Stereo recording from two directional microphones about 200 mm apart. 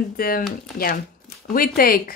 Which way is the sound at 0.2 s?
45° left (ahead or behind).